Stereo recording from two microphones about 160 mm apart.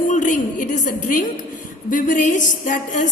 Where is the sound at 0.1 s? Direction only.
55° left (ahead or behind).